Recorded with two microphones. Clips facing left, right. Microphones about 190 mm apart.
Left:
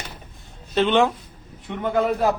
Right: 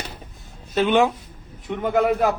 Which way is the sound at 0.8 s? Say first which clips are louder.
Even; 5° right (ahead or behind).